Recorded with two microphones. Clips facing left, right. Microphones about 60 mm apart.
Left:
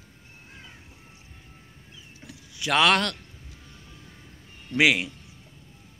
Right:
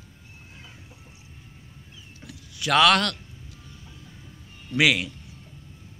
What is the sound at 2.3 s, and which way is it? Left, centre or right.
Vehicle, left.